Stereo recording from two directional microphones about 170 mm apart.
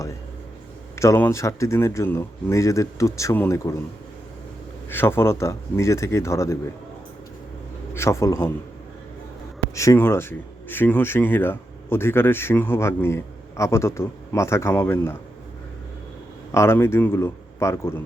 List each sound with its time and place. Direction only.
0.9 s speech: 15° left (ahead or behind)
4.9 s speech: 15° left (ahead or behind)
7.9 s speech: 15° left (ahead or behind)
9.7 s speech: 15° left (ahead or behind)
16.5 s speech: 15° left (ahead or behind)